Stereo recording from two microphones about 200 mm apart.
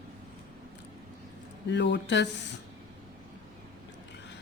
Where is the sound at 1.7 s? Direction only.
60° left (ahead or behind).